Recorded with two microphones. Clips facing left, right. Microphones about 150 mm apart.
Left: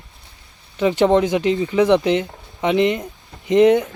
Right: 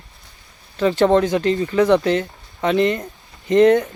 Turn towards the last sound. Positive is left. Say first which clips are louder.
# even
turn(degrees=15)  # may be behind; listen again after turning